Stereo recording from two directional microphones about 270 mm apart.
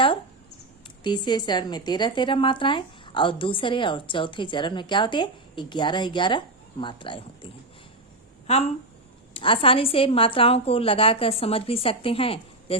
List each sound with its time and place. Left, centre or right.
1.0 s a woman's voice: centre